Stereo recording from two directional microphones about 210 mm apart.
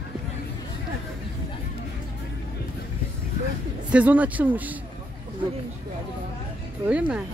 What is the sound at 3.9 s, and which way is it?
Speech, 5° right (ahead or behind).